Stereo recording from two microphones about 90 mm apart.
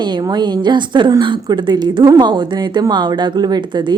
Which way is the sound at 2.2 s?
55° right (ahead or behind).